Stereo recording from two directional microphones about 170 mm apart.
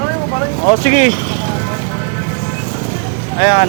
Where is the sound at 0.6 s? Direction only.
35° left (ahead or behind).